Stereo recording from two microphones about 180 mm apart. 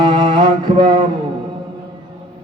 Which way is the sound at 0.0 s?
25° right (ahead or behind).